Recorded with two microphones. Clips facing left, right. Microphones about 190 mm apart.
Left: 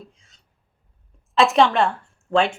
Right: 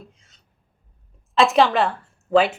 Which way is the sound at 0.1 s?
Centre (ahead or behind).